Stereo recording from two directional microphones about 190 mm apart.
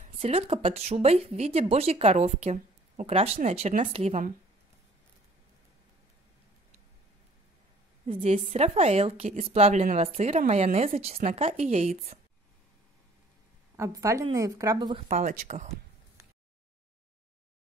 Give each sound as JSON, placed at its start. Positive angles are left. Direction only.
{"t": 0.0, "sound": "speech", "side_deg": -35}
{"t": 8.1, "sound": "speech", "side_deg": -35}
{"t": 13.7, "sound": "a woman's voice", "side_deg": -15}
{"t": 15.0, "sound": "speech", "side_deg": -35}